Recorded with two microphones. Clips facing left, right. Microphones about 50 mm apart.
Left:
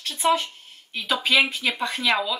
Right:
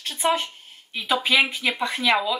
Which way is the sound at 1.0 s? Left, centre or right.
Centre.